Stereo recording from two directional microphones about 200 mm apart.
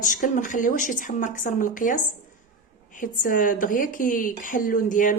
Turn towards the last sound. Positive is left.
turn(degrees=40)  # may be behind; listen again after turning